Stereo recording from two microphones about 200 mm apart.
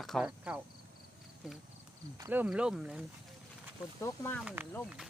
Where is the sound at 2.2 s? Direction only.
10° right (ahead or behind).